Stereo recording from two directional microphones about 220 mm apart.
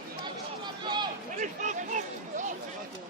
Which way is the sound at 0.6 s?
20° right (ahead or behind).